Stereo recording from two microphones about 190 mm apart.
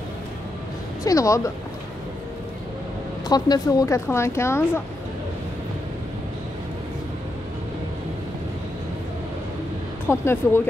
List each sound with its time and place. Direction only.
1.0 s speech: 15° left (ahead or behind)
3.3 s speech: 20° left (ahead or behind)
10.0 s speech: 10° left (ahead or behind)